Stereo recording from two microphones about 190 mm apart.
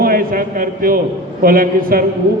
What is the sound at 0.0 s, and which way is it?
A man's voice, 50° right (ahead or behind).